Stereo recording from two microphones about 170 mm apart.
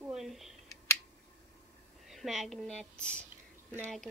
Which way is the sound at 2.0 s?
Centre (ahead or behind).